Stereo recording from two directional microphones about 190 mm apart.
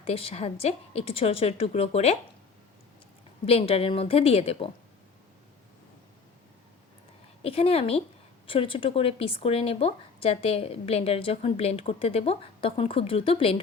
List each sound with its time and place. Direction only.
0.0 s speech: 30° left (ahead or behind)
3.4 s speech: 30° left (ahead or behind)
7.4 s speech: 30° left (ahead or behind)